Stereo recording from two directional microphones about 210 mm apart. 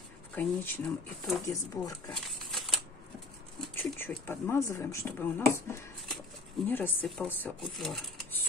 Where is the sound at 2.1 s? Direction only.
Centre (ahead or behind).